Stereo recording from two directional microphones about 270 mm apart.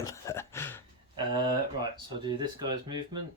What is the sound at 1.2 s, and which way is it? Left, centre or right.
Speech, centre.